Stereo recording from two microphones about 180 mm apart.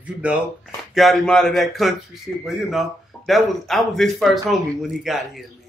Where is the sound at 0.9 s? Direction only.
Centre (ahead or behind).